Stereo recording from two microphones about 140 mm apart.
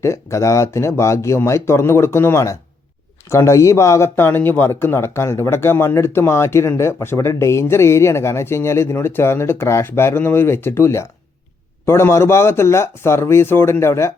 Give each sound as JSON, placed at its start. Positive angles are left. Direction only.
{"t": 0.0, "sound": "speech", "side_deg": 20}